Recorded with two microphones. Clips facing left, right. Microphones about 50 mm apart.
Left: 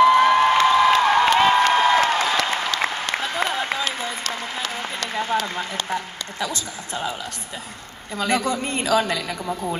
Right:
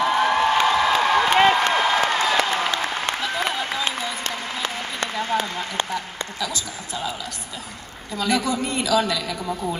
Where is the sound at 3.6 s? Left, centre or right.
Left.